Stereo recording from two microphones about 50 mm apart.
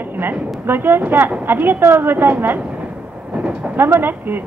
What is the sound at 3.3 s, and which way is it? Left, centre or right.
Vehicle, right.